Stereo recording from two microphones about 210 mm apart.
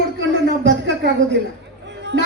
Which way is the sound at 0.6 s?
55° right (ahead or behind).